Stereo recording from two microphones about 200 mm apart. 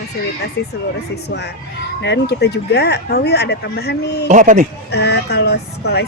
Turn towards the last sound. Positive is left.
turn(degrees=55)  # may be behind; listen again after turning